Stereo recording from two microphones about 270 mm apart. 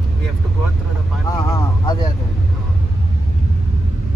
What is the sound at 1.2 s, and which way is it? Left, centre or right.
Speech, centre.